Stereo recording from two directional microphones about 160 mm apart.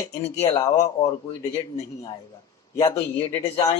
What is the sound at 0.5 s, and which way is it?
Speech, 20° left (ahead or behind).